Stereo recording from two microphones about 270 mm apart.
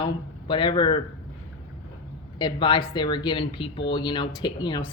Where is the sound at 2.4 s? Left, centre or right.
Centre.